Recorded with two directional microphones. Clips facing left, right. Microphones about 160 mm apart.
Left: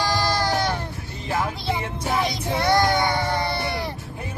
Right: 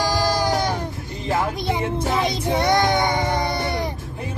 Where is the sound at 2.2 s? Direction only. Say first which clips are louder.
Right 3 dB; 20° right (ahead or behind).